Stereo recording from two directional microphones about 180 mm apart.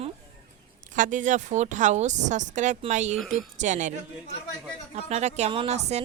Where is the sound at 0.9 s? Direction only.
45° right (ahead or behind).